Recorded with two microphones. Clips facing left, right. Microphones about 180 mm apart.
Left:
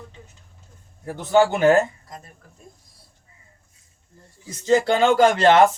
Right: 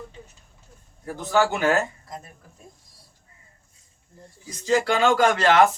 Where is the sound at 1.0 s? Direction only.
25° left (ahead or behind).